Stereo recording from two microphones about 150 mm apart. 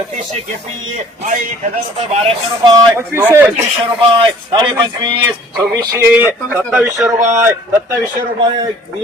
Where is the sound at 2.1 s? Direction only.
40° right (ahead or behind).